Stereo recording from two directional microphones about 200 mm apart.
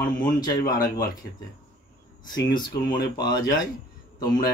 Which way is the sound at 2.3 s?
20° left (ahead or behind).